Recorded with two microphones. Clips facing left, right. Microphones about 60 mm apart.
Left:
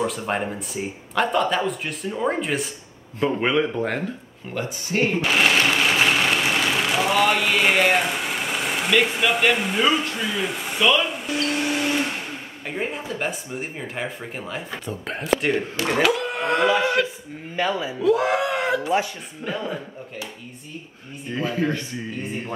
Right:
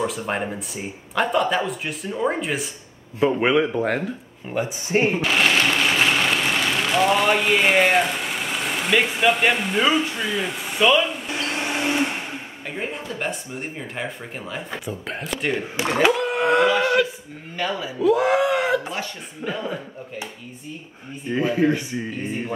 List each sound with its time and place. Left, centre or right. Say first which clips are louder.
0.0 s speech: even; centre
4.5 s speech: right 3 dB; centre
5.2 s speech: even; centre
11.2 s a sound: left 2 dB; right
12.6 s speech: left 2 dB; centre
17.6 s speech: left 2 dB; centre
17.9 s speech: right 3 dB; centre
21.3 s speech: right 4 dB; centre